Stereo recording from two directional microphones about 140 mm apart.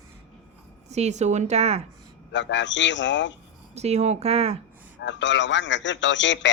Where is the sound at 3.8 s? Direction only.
50° right (ahead or behind).